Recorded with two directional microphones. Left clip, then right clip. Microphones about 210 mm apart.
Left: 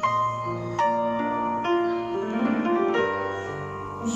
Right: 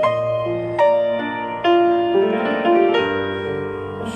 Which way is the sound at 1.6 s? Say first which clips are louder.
Right 9 dB; 40° right (ahead or behind).